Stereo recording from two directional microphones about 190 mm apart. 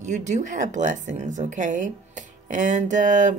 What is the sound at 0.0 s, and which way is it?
A woman's voice, 40° right (ahead or behind).